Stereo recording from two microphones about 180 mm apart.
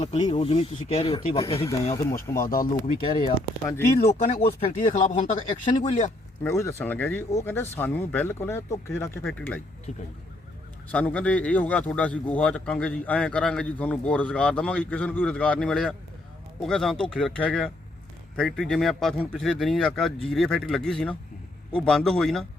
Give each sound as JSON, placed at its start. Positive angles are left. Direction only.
{"t": 0.0, "sound": "a man's voice", "side_deg": 35}
{"t": 4.0, "sound": "speech", "side_deg": 35}
{"t": 5.6, "sound": "speech", "side_deg": 30}
{"t": 6.4, "sound": "a man's voice", "side_deg": 15}
{"t": 10.9, "sound": "a man's voice", "side_deg": 5}